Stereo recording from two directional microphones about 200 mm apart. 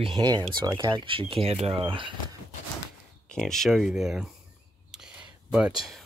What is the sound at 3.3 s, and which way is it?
Speech, centre (ahead or behind).